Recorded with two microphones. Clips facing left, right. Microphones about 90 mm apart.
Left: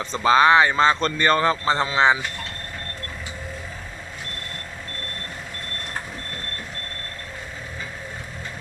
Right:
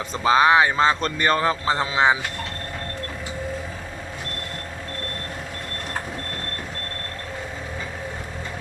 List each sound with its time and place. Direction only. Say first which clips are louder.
0.0 s speech: left 1 dB; 10° right (ahead or behind)